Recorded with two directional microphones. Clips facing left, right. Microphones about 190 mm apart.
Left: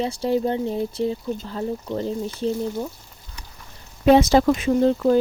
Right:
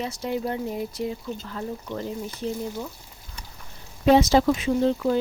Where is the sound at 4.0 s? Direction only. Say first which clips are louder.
Left 3 dB; 55° left (ahead or behind).